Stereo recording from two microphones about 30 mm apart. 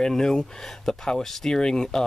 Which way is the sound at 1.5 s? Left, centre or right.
Left.